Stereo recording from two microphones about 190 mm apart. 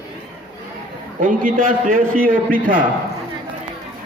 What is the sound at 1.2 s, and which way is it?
A man's voice, 45° right (ahead or behind).